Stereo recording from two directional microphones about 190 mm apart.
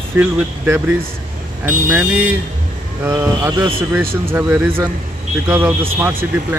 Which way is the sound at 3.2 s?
5° right (ahead or behind).